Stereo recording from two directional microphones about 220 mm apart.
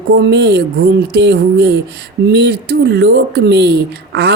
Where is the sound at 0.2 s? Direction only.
50° right (ahead or behind).